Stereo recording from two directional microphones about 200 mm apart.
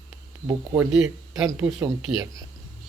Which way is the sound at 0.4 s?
15° right (ahead or behind).